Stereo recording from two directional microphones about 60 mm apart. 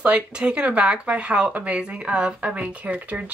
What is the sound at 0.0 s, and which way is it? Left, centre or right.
Speech, right.